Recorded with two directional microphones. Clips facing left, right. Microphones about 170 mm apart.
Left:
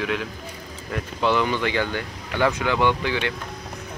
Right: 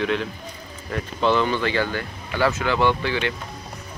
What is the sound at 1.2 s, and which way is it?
Speech, 10° left (ahead or behind).